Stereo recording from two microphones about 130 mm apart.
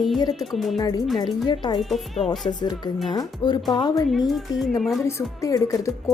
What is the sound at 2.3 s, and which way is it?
Speech, 35° left (ahead or behind).